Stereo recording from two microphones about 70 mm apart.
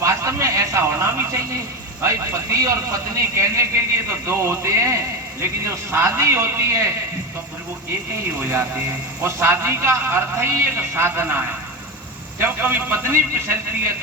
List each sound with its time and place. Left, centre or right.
0.0 s a sound: right
2.0 s a man's voice: right
8.4 s a man's voice: right